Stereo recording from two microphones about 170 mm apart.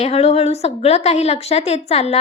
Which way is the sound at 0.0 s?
40° left (ahead or behind).